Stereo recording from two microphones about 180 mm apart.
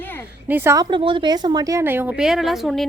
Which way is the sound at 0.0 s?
10° left (ahead or behind).